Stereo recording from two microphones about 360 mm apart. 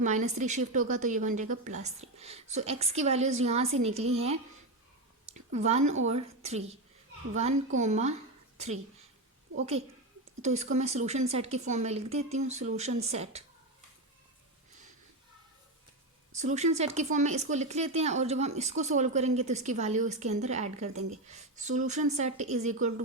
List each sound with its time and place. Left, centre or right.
0.0 s speech: centre
5.3 s a woman's voice: centre
7.8 s speech: centre
10.4 s speech: centre
16.3 s speech: centre